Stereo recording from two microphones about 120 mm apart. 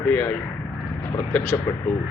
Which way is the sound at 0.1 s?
15° left (ahead or behind).